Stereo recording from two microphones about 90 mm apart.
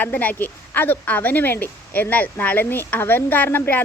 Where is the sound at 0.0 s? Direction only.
20° left (ahead or behind).